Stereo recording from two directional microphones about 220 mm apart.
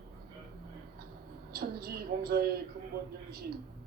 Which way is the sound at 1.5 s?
45° right (ahead or behind).